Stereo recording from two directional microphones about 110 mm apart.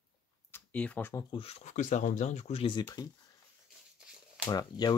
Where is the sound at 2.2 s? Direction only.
90° left.